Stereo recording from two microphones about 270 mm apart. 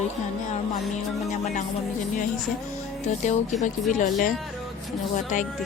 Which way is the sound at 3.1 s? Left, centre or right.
Left.